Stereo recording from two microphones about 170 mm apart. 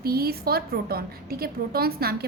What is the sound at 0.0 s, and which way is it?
A woman's voice, 65° right (ahead or behind).